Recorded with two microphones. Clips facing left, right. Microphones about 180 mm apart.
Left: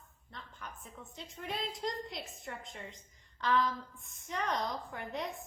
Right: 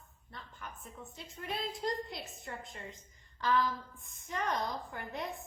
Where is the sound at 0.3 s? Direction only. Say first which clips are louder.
Even; 5° right (ahead or behind).